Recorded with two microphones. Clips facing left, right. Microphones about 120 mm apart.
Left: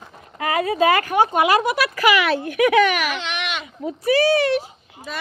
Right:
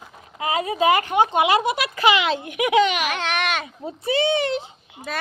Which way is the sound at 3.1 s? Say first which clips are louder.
Right 3 dB; 45° right (ahead or behind).